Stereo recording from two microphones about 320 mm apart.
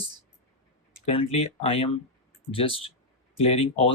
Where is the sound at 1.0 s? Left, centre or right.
Centre.